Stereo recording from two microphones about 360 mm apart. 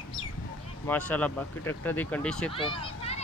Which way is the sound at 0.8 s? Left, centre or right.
Centre.